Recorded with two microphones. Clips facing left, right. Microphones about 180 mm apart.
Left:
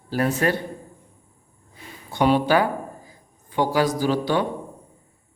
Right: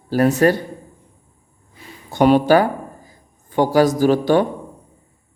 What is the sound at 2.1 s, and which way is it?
A man's voice, 45° right (ahead or behind).